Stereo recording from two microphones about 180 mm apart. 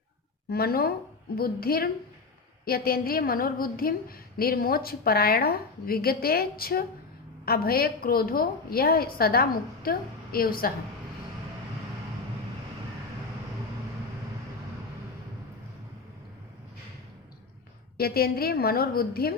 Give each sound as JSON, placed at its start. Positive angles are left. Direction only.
{"t": 0.5, "sound": "a woman's voice", "side_deg": 55}
{"t": 17.9, "sound": "a woman's voice", "side_deg": 60}